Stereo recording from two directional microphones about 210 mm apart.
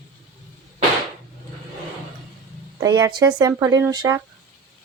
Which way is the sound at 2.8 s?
15° right (ahead or behind).